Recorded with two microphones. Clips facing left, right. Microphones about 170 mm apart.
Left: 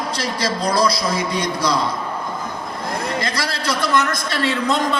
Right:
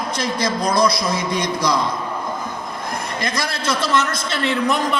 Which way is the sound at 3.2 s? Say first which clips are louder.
Even; 20° right (ahead or behind).